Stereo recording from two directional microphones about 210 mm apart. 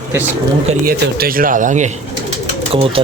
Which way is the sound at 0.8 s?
45° right (ahead or behind).